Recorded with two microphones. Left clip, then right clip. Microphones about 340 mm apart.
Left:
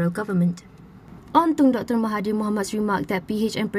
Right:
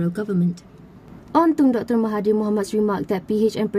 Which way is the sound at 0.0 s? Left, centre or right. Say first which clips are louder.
Even; centre.